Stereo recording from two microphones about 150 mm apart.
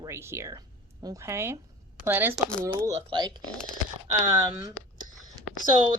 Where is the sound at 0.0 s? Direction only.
15° right (ahead or behind).